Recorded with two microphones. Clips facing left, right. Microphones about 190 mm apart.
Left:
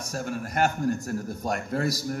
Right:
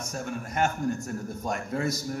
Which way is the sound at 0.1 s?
35° left (ahead or behind).